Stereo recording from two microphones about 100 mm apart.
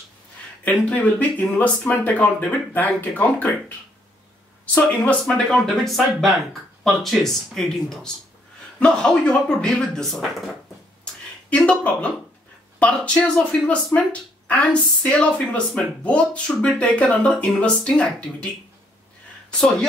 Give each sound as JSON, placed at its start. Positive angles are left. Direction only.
{"t": 0.7, "sound": "speech", "side_deg": 15}
{"t": 4.7, "sound": "speech", "side_deg": 10}
{"t": 11.5, "sound": "speech", "side_deg": 10}